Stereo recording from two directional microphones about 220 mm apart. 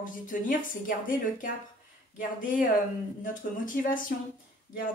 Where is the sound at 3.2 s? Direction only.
35° left (ahead or behind).